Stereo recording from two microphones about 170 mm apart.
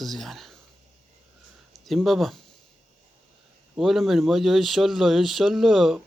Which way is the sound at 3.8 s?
Centre (ahead or behind).